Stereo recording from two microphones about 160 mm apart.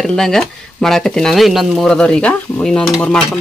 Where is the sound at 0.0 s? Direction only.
5° left (ahead or behind).